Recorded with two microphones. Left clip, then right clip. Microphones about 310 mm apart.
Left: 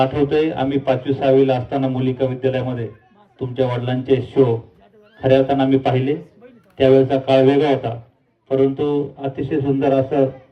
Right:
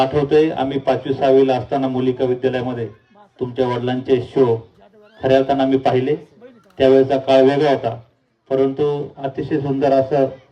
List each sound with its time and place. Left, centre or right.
0.0 s a man's voice: right